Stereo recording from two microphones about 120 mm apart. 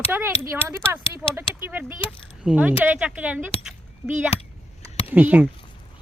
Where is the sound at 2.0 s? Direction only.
50° left (ahead or behind).